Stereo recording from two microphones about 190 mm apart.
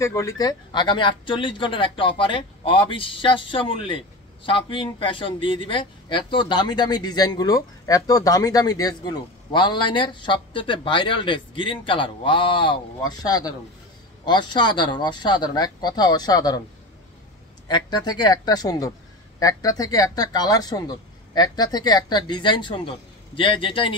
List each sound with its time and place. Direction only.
0.0 s speech: 15° left (ahead or behind)
17.6 s speech: 20° left (ahead or behind)